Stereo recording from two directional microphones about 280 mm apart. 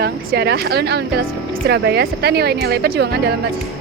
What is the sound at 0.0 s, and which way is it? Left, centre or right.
Speech, right.